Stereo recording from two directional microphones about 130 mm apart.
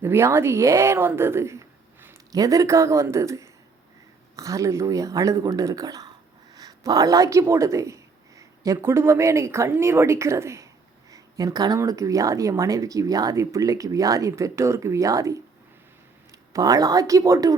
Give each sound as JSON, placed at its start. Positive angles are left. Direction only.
{"t": 0.0, "sound": "a woman's voice", "side_deg": -20}
{"t": 16.5, "sound": "speech", "side_deg": -25}